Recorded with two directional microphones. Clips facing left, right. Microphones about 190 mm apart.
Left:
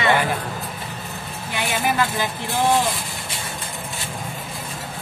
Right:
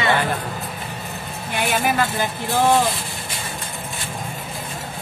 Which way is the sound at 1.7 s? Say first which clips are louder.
Right 1 dB; 50° right (ahead or behind).